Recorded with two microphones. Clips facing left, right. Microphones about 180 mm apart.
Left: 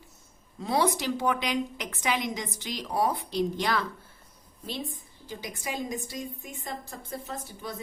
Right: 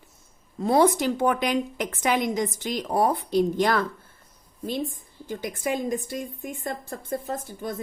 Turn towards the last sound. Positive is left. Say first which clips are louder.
# right 6 dB
turn(degrees=-50)  # may be behind; listen again after turning